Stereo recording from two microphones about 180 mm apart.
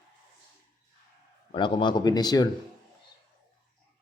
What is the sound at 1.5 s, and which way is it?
Speech, 25° left (ahead or behind).